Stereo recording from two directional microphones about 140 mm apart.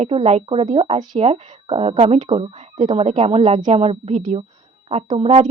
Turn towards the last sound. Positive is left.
turn(degrees=-45)  # may be behind; listen again after turning